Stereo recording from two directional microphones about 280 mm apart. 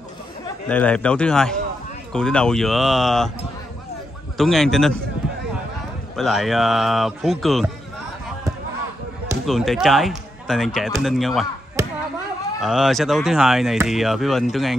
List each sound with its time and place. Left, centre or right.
0.7 s speech: centre
4.4 s speech: centre
6.1 s speech: centre
9.5 s speech: centre
12.6 s speech: centre